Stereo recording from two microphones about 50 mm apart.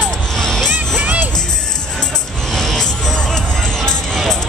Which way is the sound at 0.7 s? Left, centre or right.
Right.